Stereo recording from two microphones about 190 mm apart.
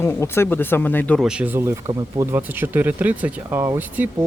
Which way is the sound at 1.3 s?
5° right (ahead or behind).